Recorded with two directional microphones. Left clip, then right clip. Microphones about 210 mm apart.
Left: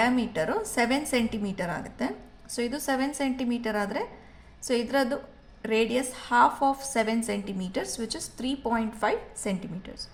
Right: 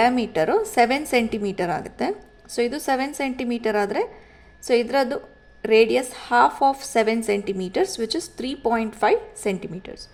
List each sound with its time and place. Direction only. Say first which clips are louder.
0.0 s a woman's voice: right 6 dB; 35° right (ahead or behind)